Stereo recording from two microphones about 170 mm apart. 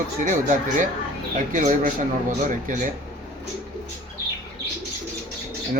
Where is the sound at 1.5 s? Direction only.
50° right (ahead or behind).